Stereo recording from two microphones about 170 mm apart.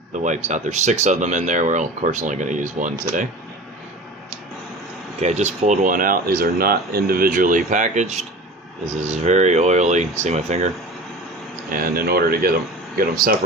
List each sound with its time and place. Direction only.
0.1 s speech: 45° right (ahead or behind)
5.2 s speech: 40° right (ahead or behind)
11.7 s speech: 60° right (ahead or behind)